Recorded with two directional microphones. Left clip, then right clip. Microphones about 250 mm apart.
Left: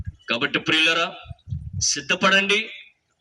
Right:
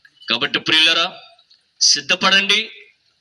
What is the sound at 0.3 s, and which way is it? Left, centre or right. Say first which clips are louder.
A man's voice: right 4 dB; centre.